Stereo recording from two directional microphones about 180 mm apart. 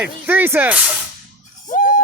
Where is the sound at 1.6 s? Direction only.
45° left (ahead or behind).